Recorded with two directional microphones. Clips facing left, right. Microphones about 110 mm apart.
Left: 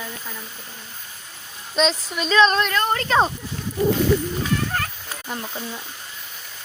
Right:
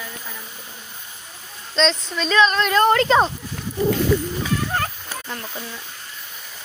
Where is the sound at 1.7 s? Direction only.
10° left (ahead or behind).